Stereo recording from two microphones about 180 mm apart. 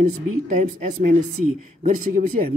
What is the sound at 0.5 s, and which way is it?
Speech, 45° right (ahead or behind).